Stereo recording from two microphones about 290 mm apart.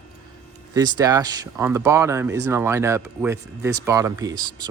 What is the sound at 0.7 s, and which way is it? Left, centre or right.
Speech, centre.